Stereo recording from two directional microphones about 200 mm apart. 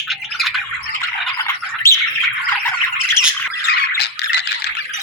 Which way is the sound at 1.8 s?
15° left (ahead or behind).